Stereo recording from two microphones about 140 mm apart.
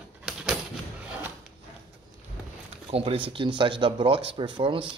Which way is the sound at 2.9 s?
40° right (ahead or behind).